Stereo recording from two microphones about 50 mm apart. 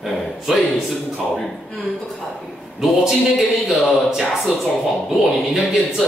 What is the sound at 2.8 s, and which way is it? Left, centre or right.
A man's voice, centre.